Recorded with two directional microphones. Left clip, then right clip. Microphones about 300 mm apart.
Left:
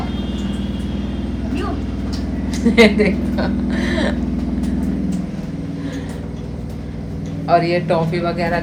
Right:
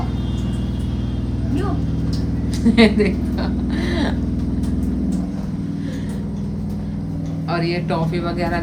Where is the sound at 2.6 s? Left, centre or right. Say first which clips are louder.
Left 3 dB; centre.